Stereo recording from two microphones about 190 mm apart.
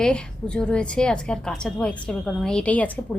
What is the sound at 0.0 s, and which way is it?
A woman's voice, 5° left (ahead or behind).